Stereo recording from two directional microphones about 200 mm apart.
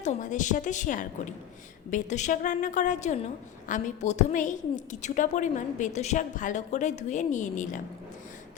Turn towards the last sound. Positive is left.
turn(degrees=40)  # may be behind; listen again after turning